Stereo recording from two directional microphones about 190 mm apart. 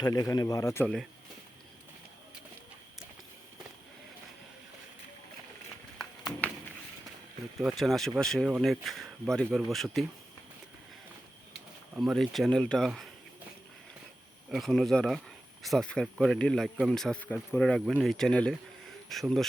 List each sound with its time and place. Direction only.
0.0 s speech: 20° left (ahead or behind)
6.0 s a sound: 5° left (ahead or behind)
7.6 s speech: centre (ahead or behind)
11.9 s speech: centre (ahead or behind)
14.5 s speech: centre (ahead or behind)